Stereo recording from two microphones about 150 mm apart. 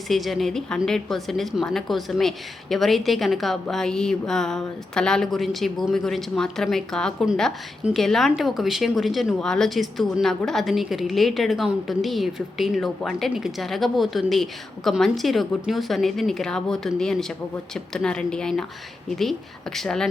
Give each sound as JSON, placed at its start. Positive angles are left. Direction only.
{"t": 0.1, "sound": "speech", "side_deg": 0}